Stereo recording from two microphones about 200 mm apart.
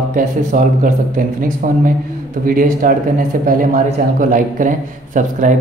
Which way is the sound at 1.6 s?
45° right (ahead or behind).